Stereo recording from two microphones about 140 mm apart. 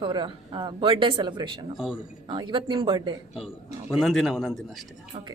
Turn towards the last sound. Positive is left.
turn(degrees=0)  # may be behind; listen again after turning